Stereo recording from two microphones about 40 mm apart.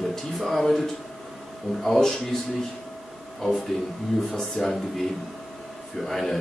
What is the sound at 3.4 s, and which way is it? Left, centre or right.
Speech, centre.